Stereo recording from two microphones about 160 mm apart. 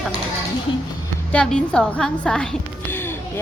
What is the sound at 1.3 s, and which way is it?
A woman's voice, 5° left (ahead or behind).